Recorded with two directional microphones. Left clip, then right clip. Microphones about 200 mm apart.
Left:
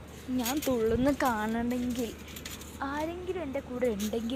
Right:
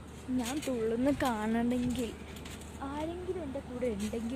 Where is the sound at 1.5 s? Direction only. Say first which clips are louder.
Even; 15° right (ahead or behind).